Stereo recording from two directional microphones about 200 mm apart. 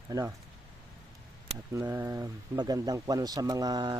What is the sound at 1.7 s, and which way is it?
Speech, 15° right (ahead or behind).